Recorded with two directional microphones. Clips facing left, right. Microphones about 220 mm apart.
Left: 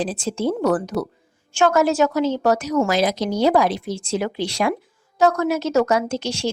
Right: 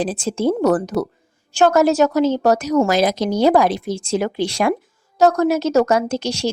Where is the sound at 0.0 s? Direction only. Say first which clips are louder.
Right 3 dB; 50° right (ahead or behind).